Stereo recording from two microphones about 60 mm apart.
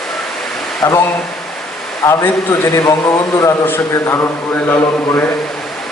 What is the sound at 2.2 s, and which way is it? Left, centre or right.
A man's voice, left.